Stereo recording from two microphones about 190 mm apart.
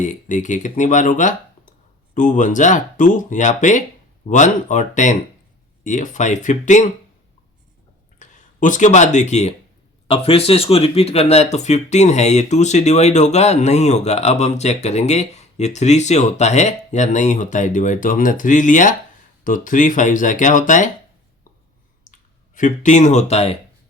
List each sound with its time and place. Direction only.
0.0 s speech: 40° left (ahead or behind)
8.2 s speech: 40° left (ahead or behind)
22.5 s speech: 40° left (ahead or behind)